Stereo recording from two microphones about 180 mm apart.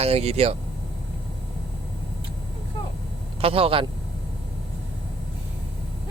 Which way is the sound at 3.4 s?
30° right (ahead or behind).